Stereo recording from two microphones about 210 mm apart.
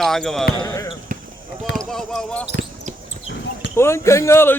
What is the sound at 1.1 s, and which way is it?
Basketball bounce, 40° right (ahead or behind).